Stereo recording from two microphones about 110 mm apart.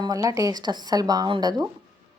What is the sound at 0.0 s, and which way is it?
A woman's voice, 30° right (ahead or behind).